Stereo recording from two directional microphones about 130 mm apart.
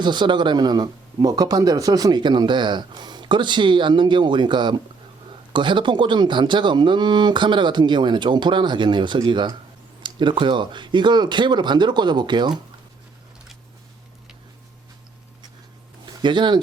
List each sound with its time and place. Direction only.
0.0 s speech: 35° right (ahead or behind)
16.2 s speech: 35° right (ahead or behind)